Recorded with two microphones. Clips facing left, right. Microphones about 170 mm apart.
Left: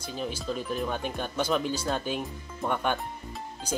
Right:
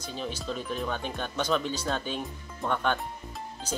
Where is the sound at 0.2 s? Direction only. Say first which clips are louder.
Left 2 dB; 5° left (ahead or behind).